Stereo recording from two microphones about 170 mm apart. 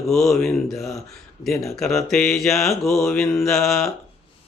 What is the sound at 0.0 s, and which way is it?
Speech, centre (ahead or behind).